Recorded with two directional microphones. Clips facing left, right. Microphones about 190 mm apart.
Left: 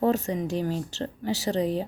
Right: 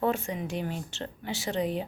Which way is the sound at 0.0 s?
35° left (ahead or behind).